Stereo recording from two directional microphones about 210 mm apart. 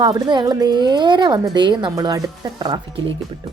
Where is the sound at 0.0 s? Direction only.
20° right (ahead or behind).